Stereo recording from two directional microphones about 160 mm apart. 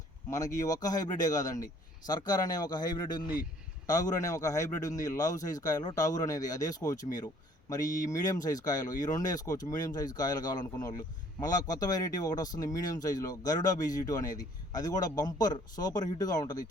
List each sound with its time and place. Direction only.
0.3 s speech: 20° left (ahead or behind)